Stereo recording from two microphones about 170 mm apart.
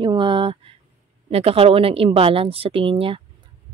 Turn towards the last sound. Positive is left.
turn(degrees=-35)  # may be behind; listen again after turning